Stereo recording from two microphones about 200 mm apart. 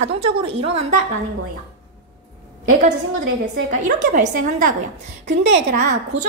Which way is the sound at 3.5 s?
40° right (ahead or behind).